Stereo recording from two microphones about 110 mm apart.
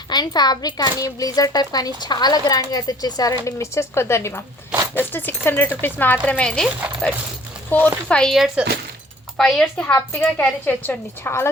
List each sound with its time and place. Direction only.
0.1 s a child's voice: 40° left (ahead or behind); by 7.9 s 20° left (ahead or behind)
8.0 s a woman's voice: 10° left (ahead or behind)